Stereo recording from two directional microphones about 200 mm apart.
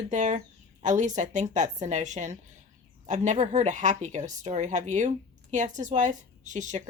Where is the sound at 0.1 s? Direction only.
35° right (ahead or behind).